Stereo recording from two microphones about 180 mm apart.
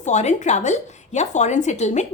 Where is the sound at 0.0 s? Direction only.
40° left (ahead or behind).